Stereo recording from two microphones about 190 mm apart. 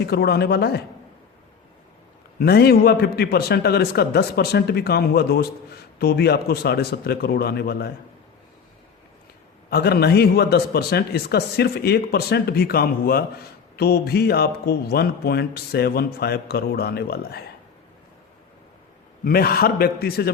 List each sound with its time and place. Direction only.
0.0 s a man's voice: 60° left (ahead or behind)
2.4 s a man's voice: 55° left (ahead or behind)
9.6 s a man's voice: 55° left (ahead or behind)
19.2 s a man's voice: 50° left (ahead or behind)